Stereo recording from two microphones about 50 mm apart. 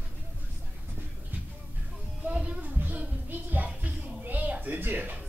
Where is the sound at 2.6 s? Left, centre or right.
Right.